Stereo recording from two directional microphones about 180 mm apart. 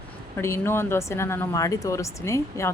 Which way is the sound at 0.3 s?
15° left (ahead or behind).